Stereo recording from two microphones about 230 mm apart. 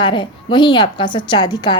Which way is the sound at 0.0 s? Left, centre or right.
Left.